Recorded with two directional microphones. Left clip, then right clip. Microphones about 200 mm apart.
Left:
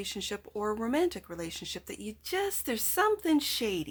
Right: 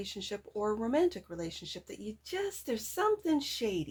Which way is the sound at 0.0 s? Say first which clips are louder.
Left 3 dB; 25° left (ahead or behind).